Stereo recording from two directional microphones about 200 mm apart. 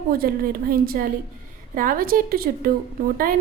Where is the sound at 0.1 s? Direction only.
45° right (ahead or behind).